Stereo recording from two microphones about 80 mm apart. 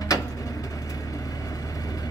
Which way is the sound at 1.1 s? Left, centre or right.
Left.